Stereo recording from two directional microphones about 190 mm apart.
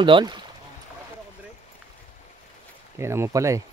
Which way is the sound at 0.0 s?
25° right (ahead or behind).